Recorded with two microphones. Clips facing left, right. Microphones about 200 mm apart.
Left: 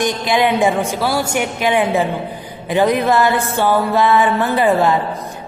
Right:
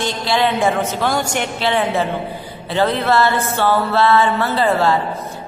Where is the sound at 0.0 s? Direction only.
15° left (ahead or behind).